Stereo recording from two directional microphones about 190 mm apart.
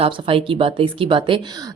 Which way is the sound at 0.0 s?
30° right (ahead or behind).